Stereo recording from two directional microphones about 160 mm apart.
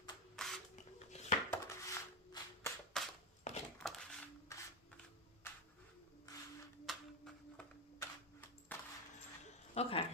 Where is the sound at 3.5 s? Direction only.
45° left (ahead or behind).